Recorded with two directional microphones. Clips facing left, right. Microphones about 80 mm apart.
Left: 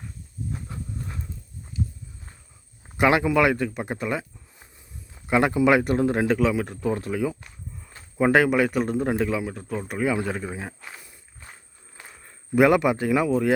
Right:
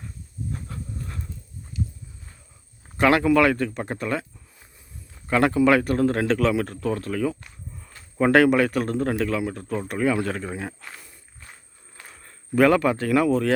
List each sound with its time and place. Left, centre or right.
0.7 s horse: centre
3.0 s speech: centre
6.7 s speech: centre
12.0 s speech: centre